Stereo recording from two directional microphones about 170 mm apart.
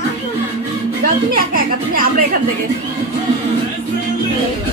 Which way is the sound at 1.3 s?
55° right (ahead or behind).